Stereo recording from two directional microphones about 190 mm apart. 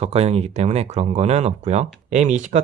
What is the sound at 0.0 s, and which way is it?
Speech, 30° right (ahead or behind).